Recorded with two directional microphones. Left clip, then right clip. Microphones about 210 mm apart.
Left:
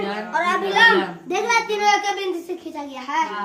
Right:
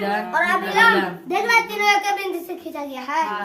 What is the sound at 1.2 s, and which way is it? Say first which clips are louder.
Speech: right 3 dB; centre (ahead or behind).